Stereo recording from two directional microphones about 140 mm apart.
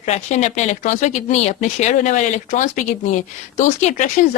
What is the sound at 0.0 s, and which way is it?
Speech, 55° left (ahead or behind).